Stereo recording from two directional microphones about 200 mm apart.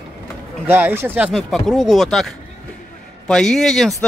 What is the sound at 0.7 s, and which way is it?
Speech, 10° right (ahead or behind).